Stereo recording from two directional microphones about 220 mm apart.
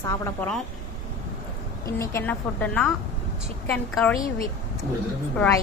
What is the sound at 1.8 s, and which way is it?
Speech, 10° left (ahead or behind).